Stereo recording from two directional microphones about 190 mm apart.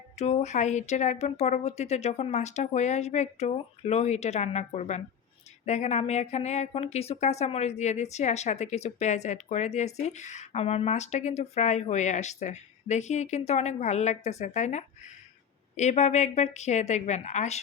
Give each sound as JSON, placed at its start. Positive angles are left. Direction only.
{"t": 0.2, "sound": "a woman's voice", "side_deg": 35}